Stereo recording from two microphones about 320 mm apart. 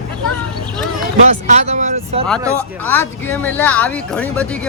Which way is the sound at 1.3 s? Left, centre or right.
Right.